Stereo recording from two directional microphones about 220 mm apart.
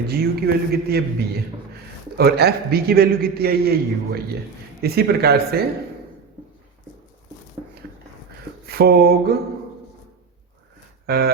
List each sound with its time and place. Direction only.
0.1 s a man's voice: 45° right (ahead or behind)
2.1 s a man's voice: 45° right (ahead or behind)
8.6 s a sound: 45° right (ahead or behind)
11.0 s speech: 45° right (ahead or behind)